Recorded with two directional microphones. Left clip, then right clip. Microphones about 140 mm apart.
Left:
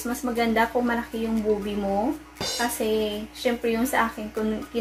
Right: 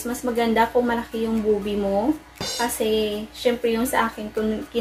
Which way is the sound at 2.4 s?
Centre (ahead or behind).